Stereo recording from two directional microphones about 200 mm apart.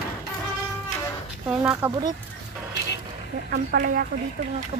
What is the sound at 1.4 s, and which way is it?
Speech, 5° right (ahead or behind).